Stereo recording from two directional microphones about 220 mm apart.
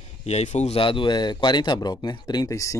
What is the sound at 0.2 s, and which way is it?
Speech, 30° left (ahead or behind).